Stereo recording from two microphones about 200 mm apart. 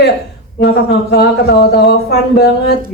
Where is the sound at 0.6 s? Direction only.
55° left (ahead or behind).